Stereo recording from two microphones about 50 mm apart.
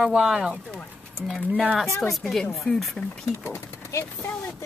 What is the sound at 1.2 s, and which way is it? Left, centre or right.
Speech, centre.